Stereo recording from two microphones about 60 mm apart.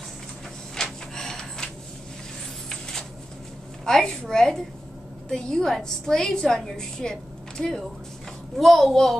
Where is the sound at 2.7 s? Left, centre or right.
Centre.